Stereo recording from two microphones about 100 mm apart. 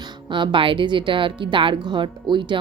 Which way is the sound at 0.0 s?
50° right (ahead or behind).